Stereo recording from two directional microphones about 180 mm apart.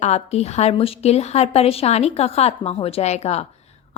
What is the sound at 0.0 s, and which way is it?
A woman's voice, 35° left (ahead or behind).